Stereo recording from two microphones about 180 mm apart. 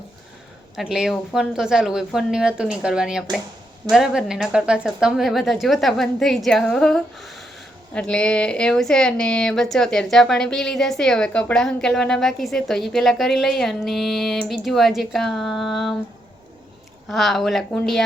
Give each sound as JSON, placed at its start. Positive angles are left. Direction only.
{"t": 0.8, "sound": "speech", "side_deg": -5}
{"t": 17.1, "sound": "speech", "side_deg": 0}